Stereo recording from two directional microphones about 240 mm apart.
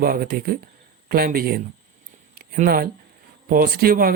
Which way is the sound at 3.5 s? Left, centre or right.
Right.